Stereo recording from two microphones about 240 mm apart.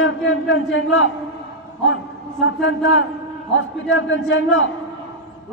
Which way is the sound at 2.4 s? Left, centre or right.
Left.